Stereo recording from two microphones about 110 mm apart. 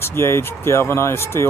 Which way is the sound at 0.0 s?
20° left (ahead or behind).